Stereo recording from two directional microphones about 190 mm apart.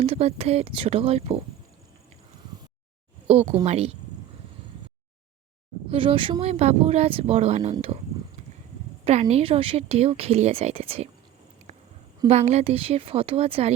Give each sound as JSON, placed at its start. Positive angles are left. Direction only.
{"t": 0.0, "sound": "speech", "side_deg": -30}
{"t": 3.2, "sound": "speech", "side_deg": -30}
{"t": 5.9, "sound": "speech", "side_deg": -30}
{"t": 9.3, "sound": "speech", "side_deg": -30}
{"t": 12.3, "sound": "speech", "side_deg": -35}